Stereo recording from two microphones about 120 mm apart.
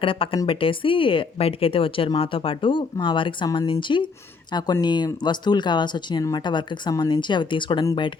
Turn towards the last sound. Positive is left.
turn(degrees=40)  # may be behind; listen again after turning